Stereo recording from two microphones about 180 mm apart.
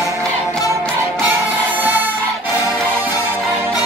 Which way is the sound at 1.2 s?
10° right (ahead or behind).